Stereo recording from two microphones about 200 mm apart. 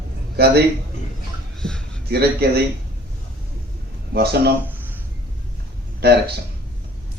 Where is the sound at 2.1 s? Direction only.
55° right (ahead or behind).